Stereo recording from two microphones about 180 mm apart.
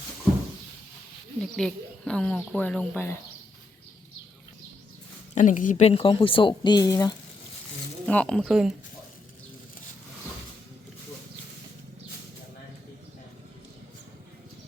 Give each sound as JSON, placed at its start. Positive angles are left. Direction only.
{"t": 1.4, "sound": "speech", "side_deg": 5}
{"t": 5.3, "sound": "speech", "side_deg": 45}
{"t": 8.0, "sound": "speech", "side_deg": 5}